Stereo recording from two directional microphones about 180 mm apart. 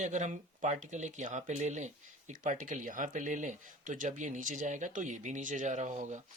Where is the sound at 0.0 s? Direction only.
40° right (ahead or behind).